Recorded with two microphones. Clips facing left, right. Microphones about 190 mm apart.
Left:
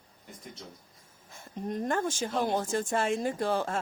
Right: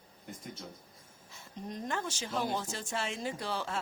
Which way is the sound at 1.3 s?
55° left (ahead or behind).